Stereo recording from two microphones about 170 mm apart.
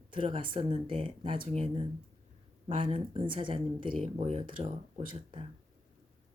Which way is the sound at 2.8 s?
30° right (ahead or behind).